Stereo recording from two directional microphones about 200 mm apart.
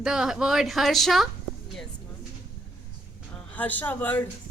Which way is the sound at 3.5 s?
10° left (ahead or behind).